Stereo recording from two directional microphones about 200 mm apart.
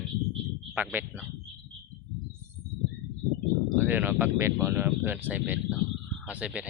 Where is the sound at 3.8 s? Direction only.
10° right (ahead or behind).